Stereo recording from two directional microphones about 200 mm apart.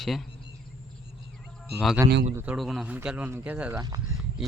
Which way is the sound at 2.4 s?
5° right (ahead or behind).